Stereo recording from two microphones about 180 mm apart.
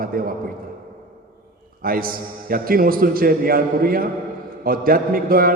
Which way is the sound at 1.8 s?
55° right (ahead or behind).